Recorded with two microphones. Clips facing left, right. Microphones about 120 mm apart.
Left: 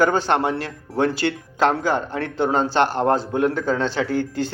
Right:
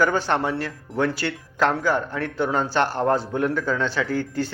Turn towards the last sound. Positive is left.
turn(degrees=25)  # may be behind; listen again after turning